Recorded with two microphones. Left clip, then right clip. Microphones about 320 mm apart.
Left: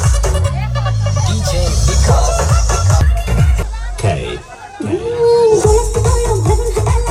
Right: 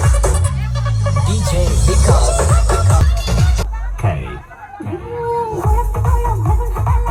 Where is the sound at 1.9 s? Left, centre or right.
Right.